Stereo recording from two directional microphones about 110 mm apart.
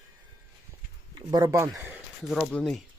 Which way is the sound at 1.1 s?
40° right (ahead or behind).